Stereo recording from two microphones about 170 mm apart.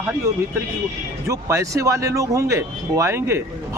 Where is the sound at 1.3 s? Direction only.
20° right (ahead or behind).